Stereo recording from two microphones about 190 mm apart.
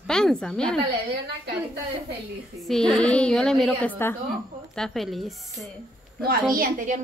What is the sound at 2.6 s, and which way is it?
A woman's voice, centre (ahead or behind).